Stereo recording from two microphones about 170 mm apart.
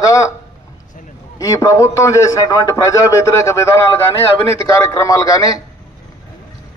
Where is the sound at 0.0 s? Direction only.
20° left (ahead or behind).